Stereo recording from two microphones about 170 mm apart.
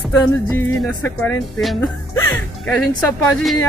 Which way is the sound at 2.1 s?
15° left (ahead or behind).